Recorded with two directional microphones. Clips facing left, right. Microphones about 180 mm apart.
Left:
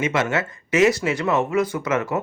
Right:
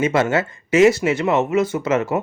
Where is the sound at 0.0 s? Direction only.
30° right (ahead or behind).